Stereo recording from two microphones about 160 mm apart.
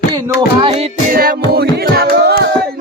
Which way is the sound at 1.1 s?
65° right (ahead or behind).